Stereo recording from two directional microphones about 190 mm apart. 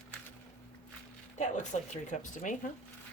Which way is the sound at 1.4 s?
40° left (ahead or behind).